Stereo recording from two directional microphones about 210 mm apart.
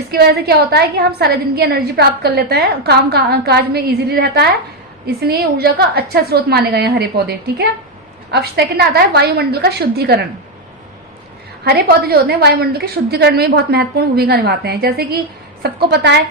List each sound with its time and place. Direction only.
0.1 s a woman's voice: 50° right (ahead or behind)
11.6 s a woman's voice: 50° right (ahead or behind)